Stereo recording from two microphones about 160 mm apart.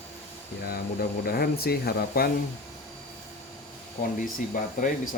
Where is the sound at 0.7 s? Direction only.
70° left (ahead or behind).